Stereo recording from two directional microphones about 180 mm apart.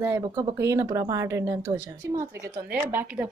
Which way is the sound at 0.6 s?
15° right (ahead or behind).